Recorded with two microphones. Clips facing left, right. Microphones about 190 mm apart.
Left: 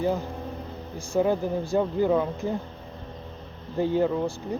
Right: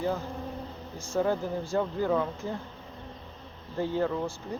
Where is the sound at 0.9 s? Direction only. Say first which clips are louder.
Left 4 dB; 15° left (ahead or behind).